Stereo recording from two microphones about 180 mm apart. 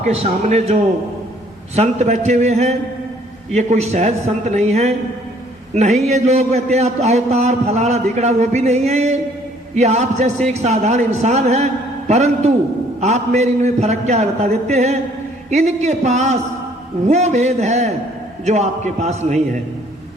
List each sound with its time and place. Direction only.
0.0 s a man's voice: 40° right (ahead or behind)
6.0 s a man's voice: 40° right (ahead or behind)